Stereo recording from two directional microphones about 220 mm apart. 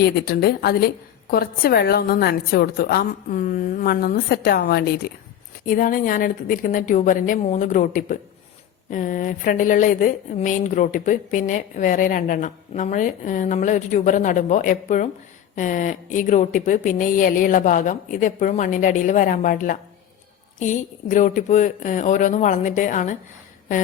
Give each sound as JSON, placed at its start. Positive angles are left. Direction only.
{"t": 0.0, "sound": "a woman's voice", "side_deg": 45}